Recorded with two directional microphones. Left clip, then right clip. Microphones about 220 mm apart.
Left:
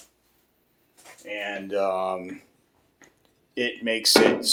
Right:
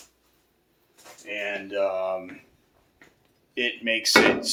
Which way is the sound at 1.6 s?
50° left (ahead or behind).